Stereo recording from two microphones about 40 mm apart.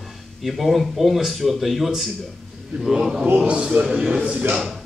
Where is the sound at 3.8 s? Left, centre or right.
Centre.